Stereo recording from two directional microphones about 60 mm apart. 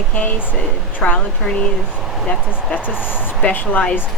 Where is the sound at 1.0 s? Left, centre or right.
Centre.